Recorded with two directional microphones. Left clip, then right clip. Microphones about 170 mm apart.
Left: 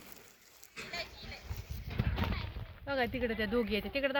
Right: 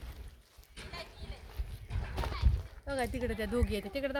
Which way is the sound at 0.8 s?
75° right (ahead or behind).